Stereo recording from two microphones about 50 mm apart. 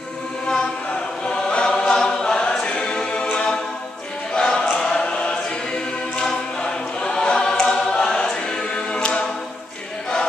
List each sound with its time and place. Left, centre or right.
1.2 s choir: centre